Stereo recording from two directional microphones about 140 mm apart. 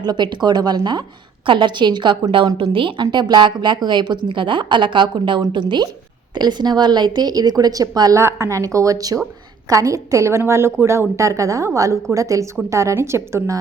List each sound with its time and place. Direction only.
0.0 s a woman's voice: 30° right (ahead or behind)